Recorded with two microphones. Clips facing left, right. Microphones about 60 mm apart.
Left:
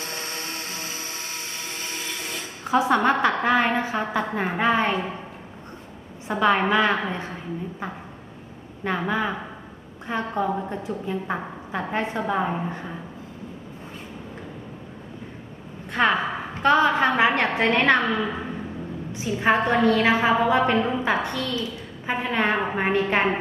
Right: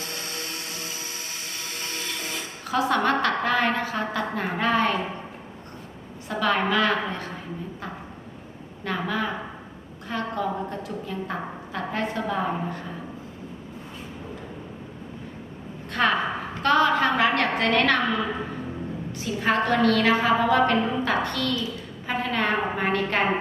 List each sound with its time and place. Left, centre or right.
0.0 s vehicle: left
2.0 s music: centre
2.6 s a woman's voice: centre
6.2 s a woman's voice: left
8.8 s a woman's voice: left
15.9 s a woman's voice: centre
18.0 s a woman's voice: centre
19.1 s a woman's voice: centre